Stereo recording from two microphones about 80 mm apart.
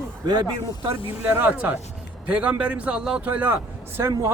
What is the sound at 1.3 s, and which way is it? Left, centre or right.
Speech, right.